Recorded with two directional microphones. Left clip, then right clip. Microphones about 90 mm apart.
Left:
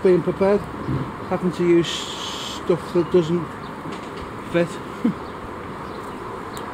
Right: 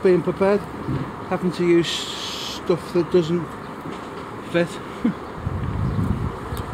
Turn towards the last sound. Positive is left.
turn(degrees=-15)  # may be behind; listen again after turning